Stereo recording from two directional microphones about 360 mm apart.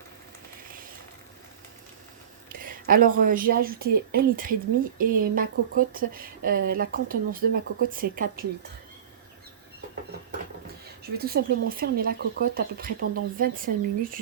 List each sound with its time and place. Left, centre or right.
0.7 s a sound: right
2.5 s a woman's voice: right
11.2 s speech: right